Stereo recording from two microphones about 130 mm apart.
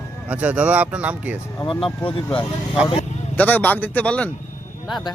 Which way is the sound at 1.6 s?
40° left (ahead or behind).